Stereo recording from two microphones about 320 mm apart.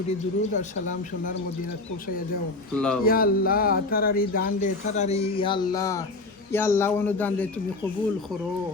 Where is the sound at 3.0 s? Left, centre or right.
Left; by 7.5 s centre.